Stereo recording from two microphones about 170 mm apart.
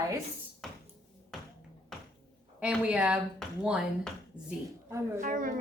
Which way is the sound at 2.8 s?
5° right (ahead or behind).